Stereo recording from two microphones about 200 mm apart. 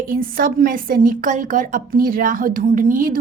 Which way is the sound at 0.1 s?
45° right (ahead or behind).